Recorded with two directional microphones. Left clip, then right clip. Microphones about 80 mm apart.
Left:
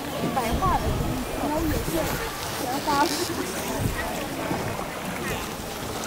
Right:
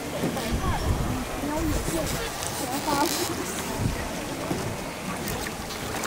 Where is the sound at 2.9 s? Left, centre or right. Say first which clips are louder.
Left 2 dB; right.